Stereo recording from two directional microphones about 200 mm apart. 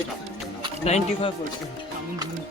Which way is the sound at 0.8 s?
30° left (ahead or behind).